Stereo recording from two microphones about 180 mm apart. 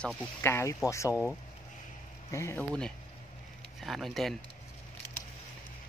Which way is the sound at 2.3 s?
15° left (ahead or behind).